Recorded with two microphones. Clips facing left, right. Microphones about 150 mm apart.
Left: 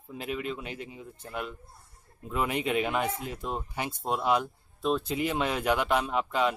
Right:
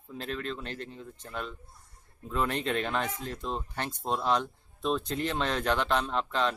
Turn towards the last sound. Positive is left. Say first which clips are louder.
# left 2 dB
turn(degrees=10)  # may be behind; listen again after turning